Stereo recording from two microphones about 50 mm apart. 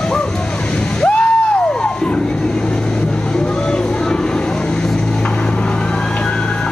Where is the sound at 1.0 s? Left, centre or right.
Centre.